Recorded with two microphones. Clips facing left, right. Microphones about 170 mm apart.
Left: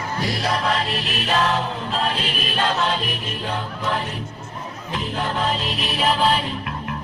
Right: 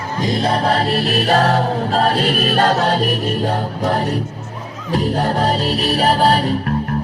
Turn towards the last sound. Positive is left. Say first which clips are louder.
# right 9 dB
turn(degrees=-40)  # may be behind; listen again after turning